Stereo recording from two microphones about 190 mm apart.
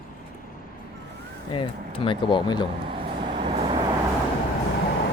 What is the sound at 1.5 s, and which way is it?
Speech, 25° left (ahead or behind).